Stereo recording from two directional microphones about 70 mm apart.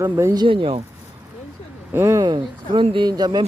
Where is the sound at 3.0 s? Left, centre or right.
Right.